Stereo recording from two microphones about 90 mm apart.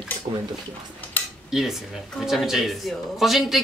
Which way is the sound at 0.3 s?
60° right (ahead or behind).